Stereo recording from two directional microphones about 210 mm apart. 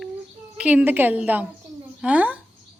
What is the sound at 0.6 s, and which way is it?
A woman's voice, 5° right (ahead or behind).